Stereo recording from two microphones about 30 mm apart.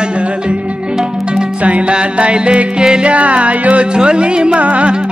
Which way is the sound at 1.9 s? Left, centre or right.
Right.